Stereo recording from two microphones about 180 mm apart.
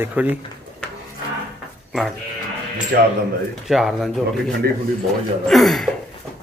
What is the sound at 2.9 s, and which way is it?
Speech, 60° right (ahead or behind).